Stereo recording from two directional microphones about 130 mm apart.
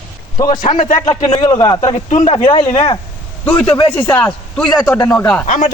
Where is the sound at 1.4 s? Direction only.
35° left (ahead or behind).